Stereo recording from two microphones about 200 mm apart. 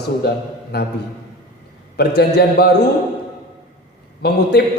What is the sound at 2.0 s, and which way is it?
Speech, 55° left (ahead or behind).